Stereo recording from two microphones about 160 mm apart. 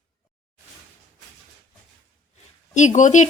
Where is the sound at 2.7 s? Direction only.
50° left (ahead or behind).